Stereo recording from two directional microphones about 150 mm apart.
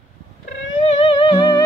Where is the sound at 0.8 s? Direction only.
40° left (ahead or behind).